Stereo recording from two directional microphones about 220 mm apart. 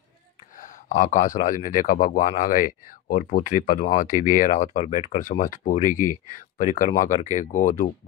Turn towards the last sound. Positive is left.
turn(degrees=35)  # may be behind; listen again after turning